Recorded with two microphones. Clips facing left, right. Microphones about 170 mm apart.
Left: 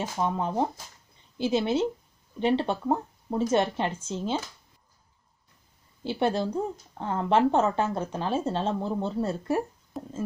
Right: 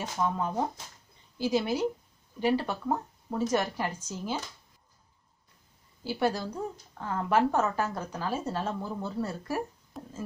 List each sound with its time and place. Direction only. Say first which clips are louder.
0.2 s speech: left 2 dB; 25° left (ahead or behind)
6.0 s speech: left 3 dB; 25° left (ahead or behind)
9.9 s a sound: left 6 dB; centre (ahead or behind)